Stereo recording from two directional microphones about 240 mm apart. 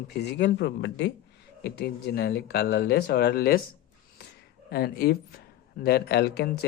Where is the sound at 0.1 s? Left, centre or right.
Left.